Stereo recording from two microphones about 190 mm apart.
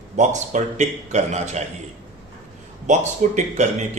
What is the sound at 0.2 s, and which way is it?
A man's voice, 40° right (ahead or behind).